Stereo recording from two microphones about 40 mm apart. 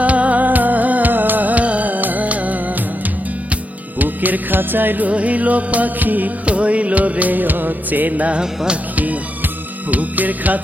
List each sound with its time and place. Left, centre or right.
0.0 s music: right
5.0 s music: right
6.4 s music: right
8.4 s music: right
9.0 s music: right